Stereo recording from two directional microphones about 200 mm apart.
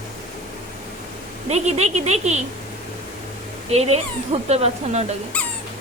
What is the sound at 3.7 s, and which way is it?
Speech, 30° right (ahead or behind).